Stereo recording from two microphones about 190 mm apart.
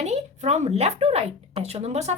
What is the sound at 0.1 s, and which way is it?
Speech, 35° right (ahead or behind).